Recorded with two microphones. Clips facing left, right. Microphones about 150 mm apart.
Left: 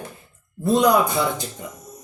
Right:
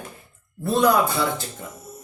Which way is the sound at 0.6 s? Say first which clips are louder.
Left 2 dB; 20° left (ahead or behind).